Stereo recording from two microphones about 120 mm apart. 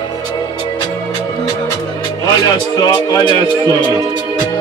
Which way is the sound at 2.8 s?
30° left (ahead or behind).